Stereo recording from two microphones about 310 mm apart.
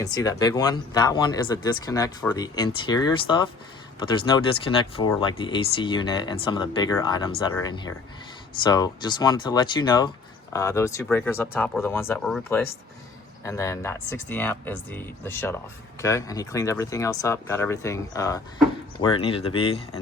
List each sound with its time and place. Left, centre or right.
0.0 s speech: centre